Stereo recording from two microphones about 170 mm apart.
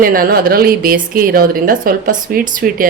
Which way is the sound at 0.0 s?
55° right (ahead or behind).